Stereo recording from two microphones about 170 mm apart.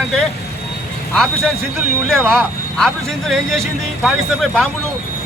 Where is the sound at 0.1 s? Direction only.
5° left (ahead or behind).